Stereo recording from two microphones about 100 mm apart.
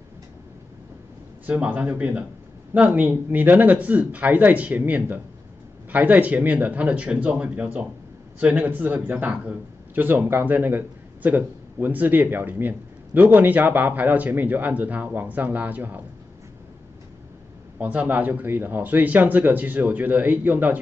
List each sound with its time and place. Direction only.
1.4 s a man's voice: 15° right (ahead or behind)
17.7 s speech: 15° right (ahead or behind)